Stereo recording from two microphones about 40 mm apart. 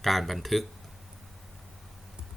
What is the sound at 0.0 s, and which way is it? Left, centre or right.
Speech, centre.